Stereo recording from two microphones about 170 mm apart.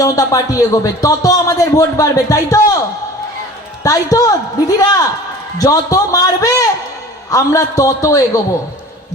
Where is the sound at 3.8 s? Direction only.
20° left (ahead or behind).